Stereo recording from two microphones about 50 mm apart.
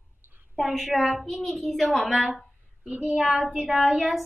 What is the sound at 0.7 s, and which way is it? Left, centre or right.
A woman's voice, centre.